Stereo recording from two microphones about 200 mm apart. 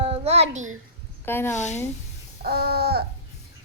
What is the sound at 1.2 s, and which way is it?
Speech, 10° left (ahead or behind).